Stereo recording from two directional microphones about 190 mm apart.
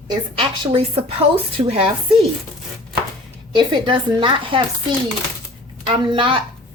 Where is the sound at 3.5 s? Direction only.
25° right (ahead or behind).